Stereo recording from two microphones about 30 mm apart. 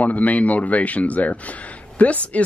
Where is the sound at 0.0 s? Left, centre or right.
Left.